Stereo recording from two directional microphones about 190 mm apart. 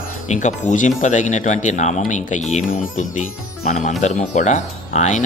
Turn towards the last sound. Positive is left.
turn(degrees=40)  # may be behind; listen again after turning